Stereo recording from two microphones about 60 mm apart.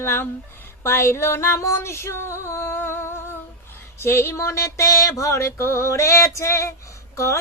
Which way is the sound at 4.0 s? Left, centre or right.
Left.